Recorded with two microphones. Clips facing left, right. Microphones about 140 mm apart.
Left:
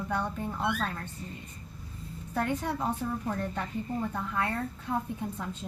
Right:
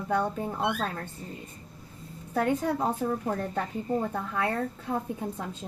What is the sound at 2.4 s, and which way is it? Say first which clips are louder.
A woman's voice: right 5 dB; 45° right (ahead or behind).